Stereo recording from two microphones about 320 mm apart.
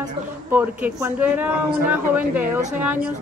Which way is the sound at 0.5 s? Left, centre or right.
Centre.